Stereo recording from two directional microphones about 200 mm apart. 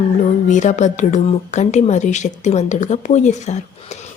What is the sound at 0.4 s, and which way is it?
A woman's voice, 40° left (ahead or behind).